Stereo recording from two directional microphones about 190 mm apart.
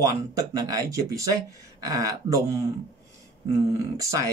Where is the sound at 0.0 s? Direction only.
20° right (ahead or behind).